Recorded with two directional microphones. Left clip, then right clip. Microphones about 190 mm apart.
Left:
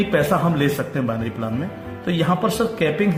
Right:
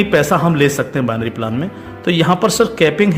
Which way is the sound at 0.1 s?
55° right (ahead or behind).